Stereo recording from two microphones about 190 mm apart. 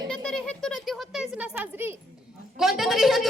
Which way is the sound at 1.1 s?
10° right (ahead or behind).